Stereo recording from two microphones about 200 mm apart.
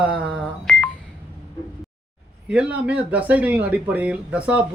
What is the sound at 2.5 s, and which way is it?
Speech, 5° right (ahead or behind).